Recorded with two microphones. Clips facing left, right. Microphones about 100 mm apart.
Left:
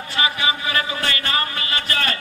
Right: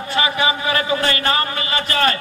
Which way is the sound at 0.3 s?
35° right (ahead or behind).